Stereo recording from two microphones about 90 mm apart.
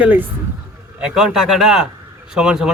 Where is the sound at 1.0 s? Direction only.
5° right (ahead or behind).